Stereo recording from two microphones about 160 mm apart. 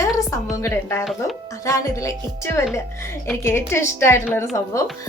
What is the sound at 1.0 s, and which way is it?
Speech, centre (ahead or behind).